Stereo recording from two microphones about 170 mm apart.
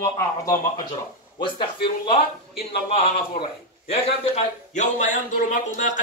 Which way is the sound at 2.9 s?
35° left (ahead or behind).